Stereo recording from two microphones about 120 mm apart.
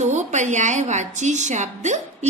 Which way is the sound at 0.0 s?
80° right.